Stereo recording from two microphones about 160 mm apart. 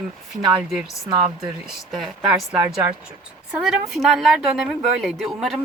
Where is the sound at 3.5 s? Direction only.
5° right (ahead or behind).